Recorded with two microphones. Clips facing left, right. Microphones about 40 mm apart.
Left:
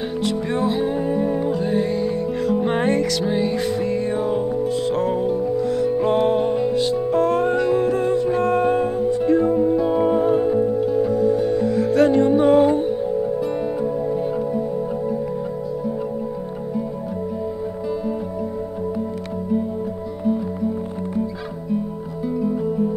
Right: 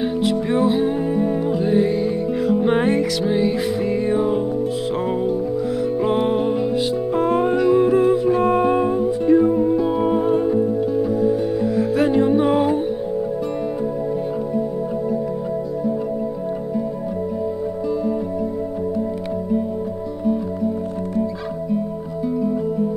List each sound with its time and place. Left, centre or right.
0.2 s music: centre
6.0 s music: centre